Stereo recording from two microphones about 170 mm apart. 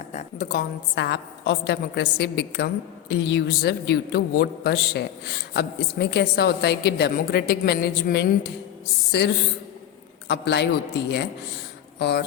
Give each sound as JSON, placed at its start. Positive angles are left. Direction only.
{"t": 0.3, "sound": "a man's voice", "side_deg": 60}
{"t": 3.1, "sound": "a man's voice", "side_deg": 90}
{"t": 10.2, "sound": "a man's voice", "side_deg": 90}